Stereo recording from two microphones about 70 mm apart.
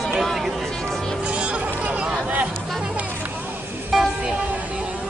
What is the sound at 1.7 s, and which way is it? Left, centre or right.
Chatter, centre.